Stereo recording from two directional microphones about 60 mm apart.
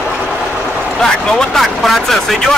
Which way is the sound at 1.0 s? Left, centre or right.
Centre.